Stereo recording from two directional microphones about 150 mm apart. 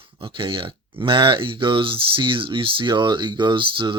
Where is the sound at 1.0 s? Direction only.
35° right (ahead or behind).